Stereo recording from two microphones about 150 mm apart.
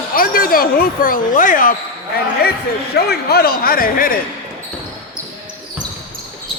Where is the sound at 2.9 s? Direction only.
90° left; by 4.1 s 70° left (ahead or behind).